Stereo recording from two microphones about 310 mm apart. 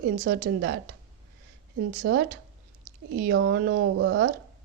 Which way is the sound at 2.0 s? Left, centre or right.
Right.